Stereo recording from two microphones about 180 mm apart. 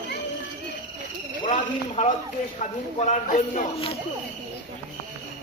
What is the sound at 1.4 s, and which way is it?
Speech, 40° left (ahead or behind).